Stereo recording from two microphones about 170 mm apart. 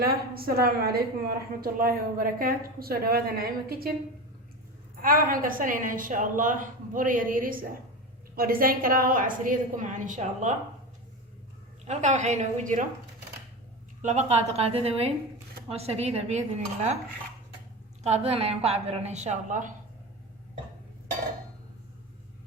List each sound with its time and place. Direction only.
0.0 s a woman's voice: 60° right (ahead or behind)
5.0 s a woman's voice: 55° right (ahead or behind)
11.9 s a woman's voice: 45° right (ahead or behind)
14.0 s a woman's voice: 45° right (ahead or behind)
18.0 s a woman's voice: 40° right (ahead or behind)